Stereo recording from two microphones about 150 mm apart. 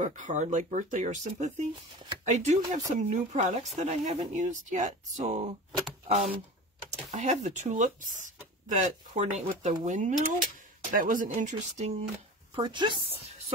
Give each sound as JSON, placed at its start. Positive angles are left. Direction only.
{"t": 0.0, "sound": "speech", "side_deg": -55}
{"t": 12.6, "sound": "a woman's voice", "side_deg": -30}